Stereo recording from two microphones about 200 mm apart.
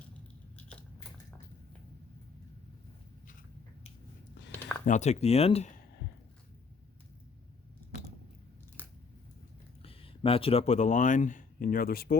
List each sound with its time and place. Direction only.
0.5 s scissors: 5° left (ahead or behind)
4.9 s speech: 35° left (ahead or behind)
9.8 s speech: 30° left (ahead or behind); by 12.1 s 50° left (ahead or behind)